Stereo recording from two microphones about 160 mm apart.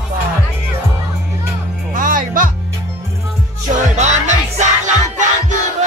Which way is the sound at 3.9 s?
45° right (ahead or behind).